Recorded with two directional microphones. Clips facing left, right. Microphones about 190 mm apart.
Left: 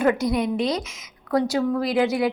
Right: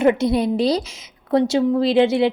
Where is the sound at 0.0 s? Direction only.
25° right (ahead or behind).